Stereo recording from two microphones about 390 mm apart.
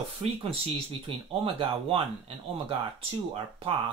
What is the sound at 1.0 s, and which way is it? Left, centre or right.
Speech, centre.